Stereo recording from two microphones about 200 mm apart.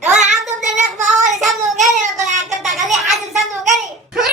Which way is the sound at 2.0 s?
35° right (ahead or behind).